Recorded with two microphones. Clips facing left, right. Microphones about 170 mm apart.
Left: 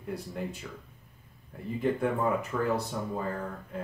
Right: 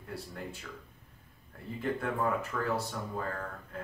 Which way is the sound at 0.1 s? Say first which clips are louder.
Left 6 dB; 20° left (ahead or behind).